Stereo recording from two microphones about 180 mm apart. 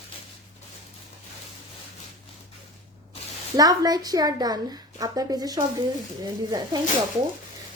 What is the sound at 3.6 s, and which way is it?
Speech, 20° right (ahead or behind).